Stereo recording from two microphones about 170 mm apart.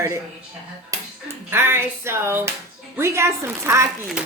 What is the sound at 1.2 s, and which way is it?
Speech, 15° right (ahead or behind).